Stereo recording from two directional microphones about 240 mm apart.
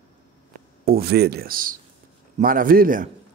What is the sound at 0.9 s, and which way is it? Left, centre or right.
Speech, right.